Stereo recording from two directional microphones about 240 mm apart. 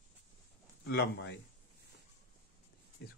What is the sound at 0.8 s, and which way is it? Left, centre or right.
Speech, left.